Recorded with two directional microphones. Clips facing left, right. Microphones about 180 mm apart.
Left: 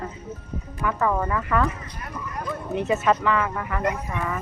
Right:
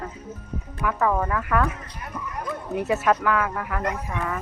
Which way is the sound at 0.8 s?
Centre (ahead or behind).